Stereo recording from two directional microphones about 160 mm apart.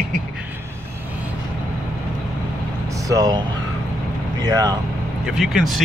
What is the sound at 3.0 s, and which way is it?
Speech, 20° right (ahead or behind).